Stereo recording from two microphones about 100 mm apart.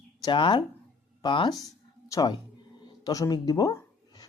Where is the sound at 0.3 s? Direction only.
55° left (ahead or behind).